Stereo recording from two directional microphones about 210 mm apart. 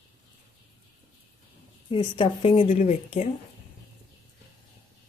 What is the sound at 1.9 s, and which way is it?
A woman's voice, 25° left (ahead or behind).